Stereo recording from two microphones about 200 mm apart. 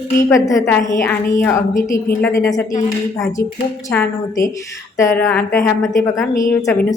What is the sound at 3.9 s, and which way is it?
Speech, 10° left (ahead or behind).